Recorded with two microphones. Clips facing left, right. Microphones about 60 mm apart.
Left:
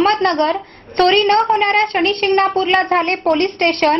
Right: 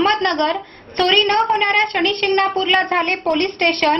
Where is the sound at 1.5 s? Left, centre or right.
Left.